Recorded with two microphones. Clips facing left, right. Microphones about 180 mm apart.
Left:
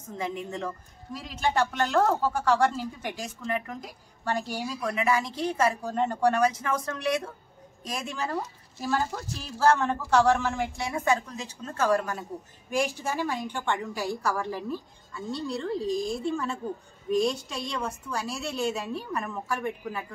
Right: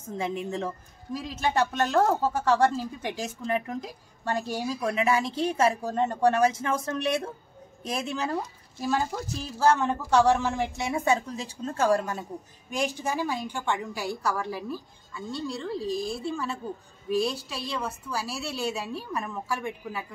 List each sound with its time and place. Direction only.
0.2 s speech: 25° right (ahead or behind)
12.8 s a woman's voice: 15° right (ahead or behind)